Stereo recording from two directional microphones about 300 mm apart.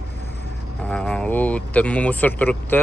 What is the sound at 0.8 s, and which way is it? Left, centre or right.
Speech, centre.